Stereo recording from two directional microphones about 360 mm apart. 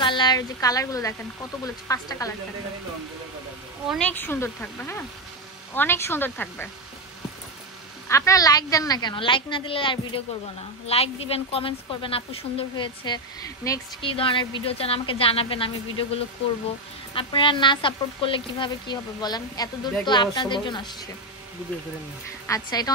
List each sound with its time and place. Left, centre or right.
0.0 s a woman's voice: centre
3.9 s speech: centre
8.1 s speech: centre
17.1 s speech: centre
22.5 s speech: centre